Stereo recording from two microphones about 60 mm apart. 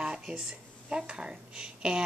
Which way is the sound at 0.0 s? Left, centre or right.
Centre.